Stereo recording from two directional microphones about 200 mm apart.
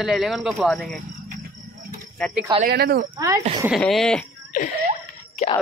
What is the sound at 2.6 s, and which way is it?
Speech, 50° right (ahead or behind).